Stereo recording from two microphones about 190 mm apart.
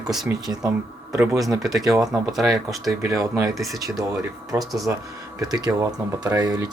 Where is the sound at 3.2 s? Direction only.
15° right (ahead or behind).